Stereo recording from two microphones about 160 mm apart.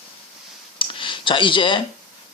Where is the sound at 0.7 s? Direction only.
30° left (ahead or behind).